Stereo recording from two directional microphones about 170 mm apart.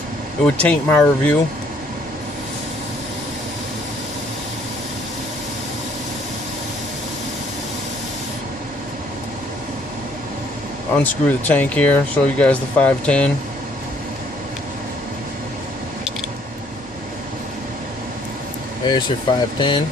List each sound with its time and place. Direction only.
0.4 s speech: 5° left (ahead or behind)
10.9 s speech: 10° left (ahead or behind)
18.9 s speech: 25° left (ahead or behind)